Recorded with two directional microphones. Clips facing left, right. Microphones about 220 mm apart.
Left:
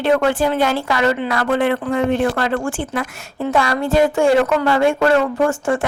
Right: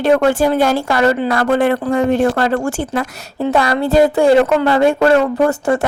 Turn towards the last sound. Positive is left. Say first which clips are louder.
# right 3 dB
turn(degrees=-40)  # may be behind; listen again after turning